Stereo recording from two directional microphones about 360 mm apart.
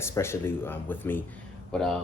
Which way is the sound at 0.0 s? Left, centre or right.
Centre.